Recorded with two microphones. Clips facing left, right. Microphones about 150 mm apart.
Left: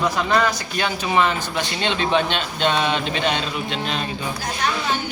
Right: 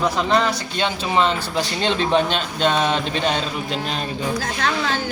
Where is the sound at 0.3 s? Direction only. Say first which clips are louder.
Right 1 dB; 25° right (ahead or behind).